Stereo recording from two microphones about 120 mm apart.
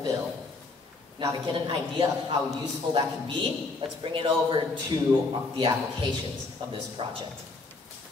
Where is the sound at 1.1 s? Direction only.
40° right (ahead or behind).